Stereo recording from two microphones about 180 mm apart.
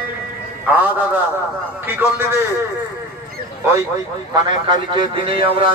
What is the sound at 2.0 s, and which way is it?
Speech, 10° right (ahead or behind).